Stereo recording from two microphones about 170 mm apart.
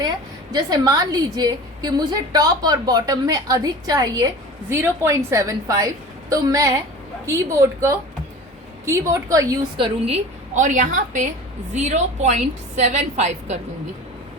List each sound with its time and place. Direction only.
0.5 s a woman's voice: 25° right (ahead or behind)
9.7 s a woman's voice: 30° right (ahead or behind)
10.5 s a woman's voice: 45° right (ahead or behind)